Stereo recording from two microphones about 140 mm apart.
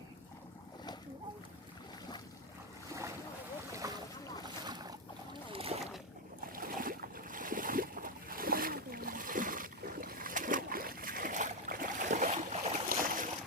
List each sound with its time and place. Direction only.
3.7 s boat: 25° right (ahead or behind); by 5.8 s 45° right (ahead or behind)
6.4 s boat: 90° right; by 12.7 s 55° right (ahead or behind)
12.9 s boat: 70° right (ahead or behind)